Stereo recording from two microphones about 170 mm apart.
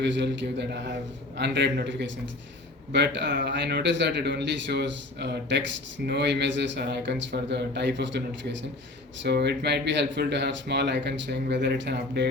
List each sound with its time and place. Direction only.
0.0 s speech: 90° right